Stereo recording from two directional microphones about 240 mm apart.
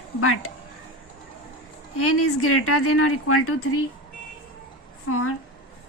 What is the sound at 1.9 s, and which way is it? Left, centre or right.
Speech, left.